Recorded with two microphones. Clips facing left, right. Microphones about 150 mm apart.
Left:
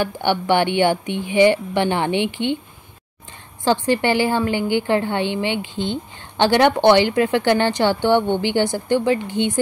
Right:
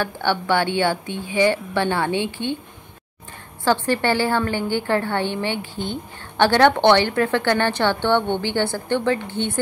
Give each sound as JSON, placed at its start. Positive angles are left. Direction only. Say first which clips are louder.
{"t": 0.0, "sound": "a woman's voice", "louder": "left 2 dB", "side_deg": 15}
{"t": 3.6, "sound": "a woman's voice", "louder": "left 2 dB", "side_deg": 15}